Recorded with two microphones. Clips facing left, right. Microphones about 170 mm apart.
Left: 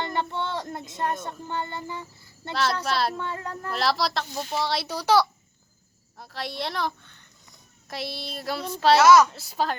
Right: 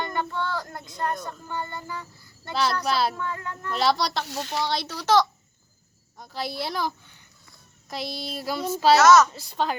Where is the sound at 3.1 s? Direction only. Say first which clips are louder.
Even; 30° left (ahead or behind).